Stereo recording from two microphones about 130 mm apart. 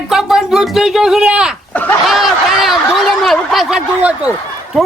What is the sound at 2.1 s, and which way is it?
Snicker, centre (ahead or behind).